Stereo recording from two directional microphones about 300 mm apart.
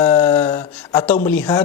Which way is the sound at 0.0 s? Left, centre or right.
Centre.